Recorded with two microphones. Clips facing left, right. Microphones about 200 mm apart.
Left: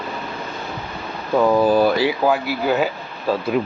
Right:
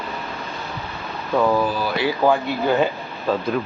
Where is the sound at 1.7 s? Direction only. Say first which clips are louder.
Left 9 dB; 55° left (ahead or behind).